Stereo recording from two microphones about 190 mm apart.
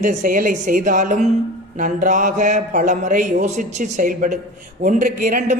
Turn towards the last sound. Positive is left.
turn(degrees=-45)  # may be behind; listen again after turning